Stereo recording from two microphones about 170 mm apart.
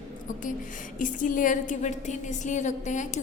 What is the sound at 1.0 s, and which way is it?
A woman's voice, 50° left (ahead or behind).